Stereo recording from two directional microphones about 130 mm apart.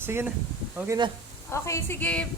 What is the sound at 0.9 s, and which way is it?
Speech, 35° right (ahead or behind).